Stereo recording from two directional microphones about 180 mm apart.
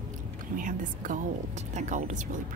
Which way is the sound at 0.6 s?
50° right (ahead or behind).